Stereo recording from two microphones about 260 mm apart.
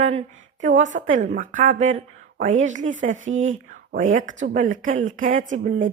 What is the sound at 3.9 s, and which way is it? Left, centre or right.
A woman's voice, right.